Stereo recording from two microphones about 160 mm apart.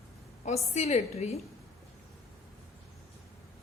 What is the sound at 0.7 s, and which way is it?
Speech, 45° left (ahead or behind).